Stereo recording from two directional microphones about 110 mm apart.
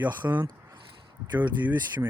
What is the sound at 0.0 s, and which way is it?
Speech, 15° right (ahead or behind).